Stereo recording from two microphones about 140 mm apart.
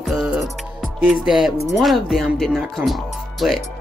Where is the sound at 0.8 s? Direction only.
Centre (ahead or behind).